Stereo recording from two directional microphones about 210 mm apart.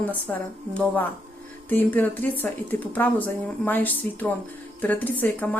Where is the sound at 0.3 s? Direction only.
5° left (ahead or behind).